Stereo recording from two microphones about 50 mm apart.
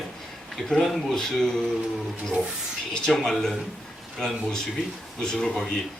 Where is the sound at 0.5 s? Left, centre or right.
Centre.